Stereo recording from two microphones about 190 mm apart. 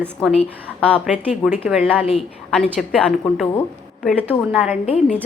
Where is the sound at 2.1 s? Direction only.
5° left (ahead or behind).